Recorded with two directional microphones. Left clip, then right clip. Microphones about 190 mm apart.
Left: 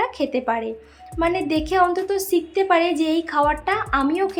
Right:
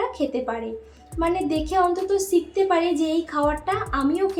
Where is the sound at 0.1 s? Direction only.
40° left (ahead or behind).